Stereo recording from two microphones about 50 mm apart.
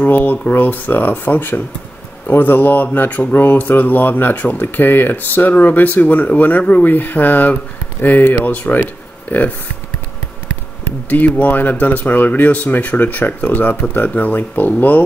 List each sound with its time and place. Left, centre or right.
0.0 s speech: left
11.1 s speech: left